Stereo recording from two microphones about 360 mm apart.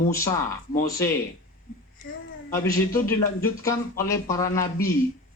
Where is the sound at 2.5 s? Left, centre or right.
Centre.